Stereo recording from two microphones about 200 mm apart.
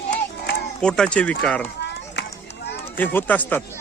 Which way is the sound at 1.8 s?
60° left (ahead or behind).